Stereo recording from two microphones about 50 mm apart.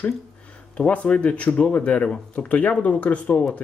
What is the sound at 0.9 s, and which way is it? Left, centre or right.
Speech, left.